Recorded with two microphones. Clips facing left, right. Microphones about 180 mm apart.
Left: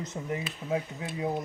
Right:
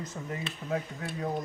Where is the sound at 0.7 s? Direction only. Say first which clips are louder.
Left 2 dB; 10° left (ahead or behind).